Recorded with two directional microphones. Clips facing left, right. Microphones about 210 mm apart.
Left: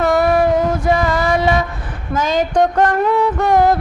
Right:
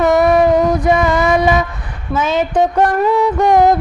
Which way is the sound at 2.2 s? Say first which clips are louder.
Even; 5° right (ahead or behind).